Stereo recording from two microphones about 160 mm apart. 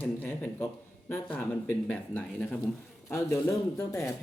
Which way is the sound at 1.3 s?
10° left (ahead or behind).